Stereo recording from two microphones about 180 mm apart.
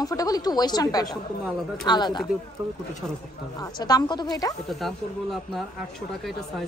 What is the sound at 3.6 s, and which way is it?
Speech, 20° left (ahead or behind).